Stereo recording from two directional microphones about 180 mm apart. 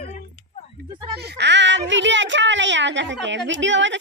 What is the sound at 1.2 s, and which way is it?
A woman's voice, 70° right (ahead or behind).